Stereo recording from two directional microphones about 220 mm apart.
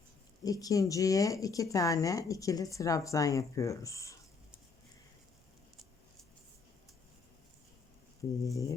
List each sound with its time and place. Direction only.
0.4 s speech: 15° left (ahead or behind)
8.2 s speech: 15° left (ahead or behind)